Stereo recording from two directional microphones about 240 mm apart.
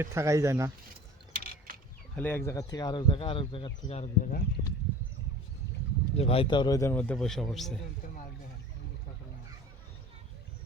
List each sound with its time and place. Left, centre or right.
0.0 s speech: centre
1.3 s mechanisms: right
2.1 s speech: centre; by 4.4 s left
6.1 s speech: left; by 7.7 s centre